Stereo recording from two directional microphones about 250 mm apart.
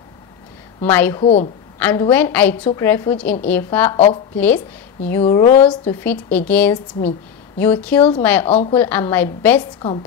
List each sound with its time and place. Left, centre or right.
0.8 s a woman's voice: centre
1.2 s a woman's voice: left
1.8 s a woman's voice: centre
3.9 s a woman's voice: left
5.2 s a woman's voice: centre
8.5 s a woman's voice: left
8.7 s a woman's voice: centre